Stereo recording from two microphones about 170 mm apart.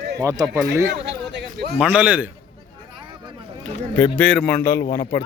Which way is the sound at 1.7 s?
5° right (ahead or behind).